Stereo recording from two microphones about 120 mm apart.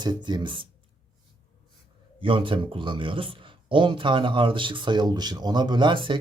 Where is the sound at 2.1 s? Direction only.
45° right (ahead or behind).